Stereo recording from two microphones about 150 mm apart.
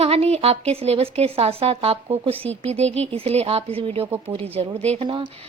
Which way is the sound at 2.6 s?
45° right (ahead or behind).